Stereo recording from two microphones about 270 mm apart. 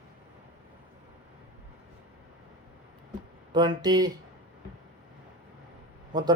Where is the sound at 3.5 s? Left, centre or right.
Centre.